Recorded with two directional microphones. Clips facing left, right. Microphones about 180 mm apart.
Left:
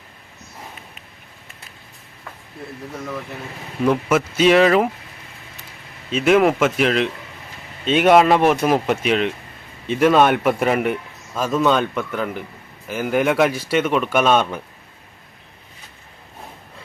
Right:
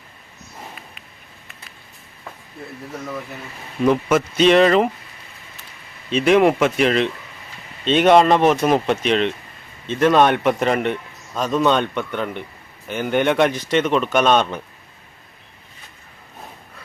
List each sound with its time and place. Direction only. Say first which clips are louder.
3.8 s speech: right 1 dB; 5° left (ahead or behind)
6.1 s a man's voice: right 1 dB; 5° left (ahead or behind)